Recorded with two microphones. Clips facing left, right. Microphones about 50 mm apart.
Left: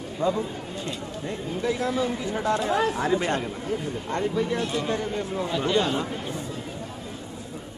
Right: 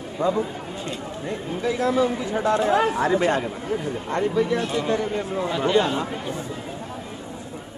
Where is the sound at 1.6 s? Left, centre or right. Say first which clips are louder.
Right 3 dB; right.